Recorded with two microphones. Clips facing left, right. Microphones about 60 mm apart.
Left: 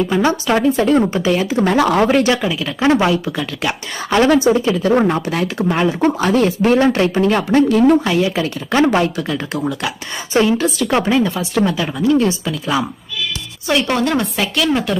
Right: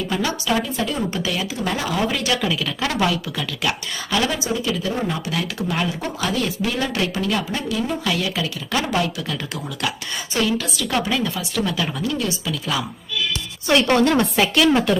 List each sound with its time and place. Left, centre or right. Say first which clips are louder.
0.1 s speech: left 7 dB; left
2.2 s speech: left 5 dB; left
4.3 s speech: left 13 dB; left
4.5 s speech: left 9 dB; left
7.4 s speech: left 12 dB; left
8.0 s speech: left 6 dB; left
13.7 s a woman's voice: even; centre